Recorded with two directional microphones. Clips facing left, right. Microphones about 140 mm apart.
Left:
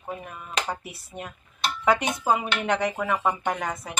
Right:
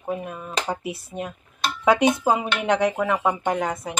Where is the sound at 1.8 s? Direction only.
20° right (ahead or behind).